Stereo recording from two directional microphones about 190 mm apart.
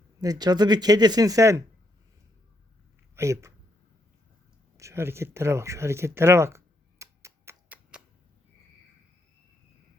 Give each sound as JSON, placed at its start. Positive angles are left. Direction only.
{"t": 0.2, "sound": "speech", "side_deg": -20}
{"t": 3.2, "sound": "speech", "side_deg": -15}
{"t": 4.8, "sound": "speech", "side_deg": -15}
{"t": 7.0, "sound": "tick-tock", "side_deg": -15}